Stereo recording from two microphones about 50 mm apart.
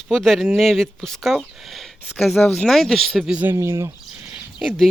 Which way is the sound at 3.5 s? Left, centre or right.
Right.